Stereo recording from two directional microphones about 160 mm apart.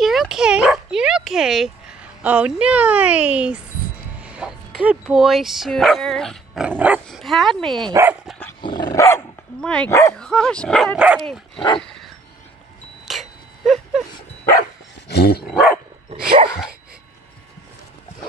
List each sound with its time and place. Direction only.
0.0 s speech: centre (ahead or behind)
7.9 s speech: 15° right (ahead or behind)
8.5 s dog: 25° left (ahead or behind)
9.6 s speech: 5° left (ahead or behind)
9.8 s speech: 15° left (ahead or behind)
10.1 s speech: 5° left (ahead or behind)
13.0 s a sound: centre (ahead or behind)
15.0 s dog: 80° left
15.4 s speech: centre (ahead or behind)